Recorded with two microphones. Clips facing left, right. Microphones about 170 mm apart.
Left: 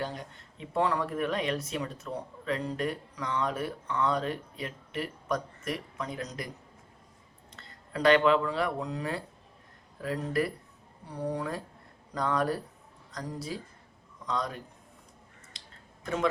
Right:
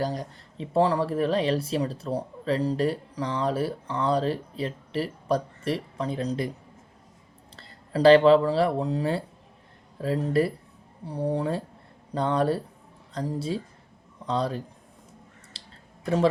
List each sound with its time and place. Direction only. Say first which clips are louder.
0.0 s speech: right 7 dB; 35° right (ahead or behind)
7.5 s speech: right 8 dB; 30° right (ahead or behind)
16.0 s speech: right 6 dB; 30° right (ahead or behind)